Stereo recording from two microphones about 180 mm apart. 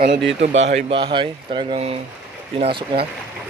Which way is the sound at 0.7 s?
30° right (ahead or behind).